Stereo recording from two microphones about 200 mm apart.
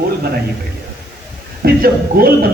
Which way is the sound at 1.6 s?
50° right (ahead or behind).